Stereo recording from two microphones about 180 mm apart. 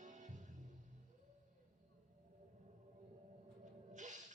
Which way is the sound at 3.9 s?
45° right (ahead or behind).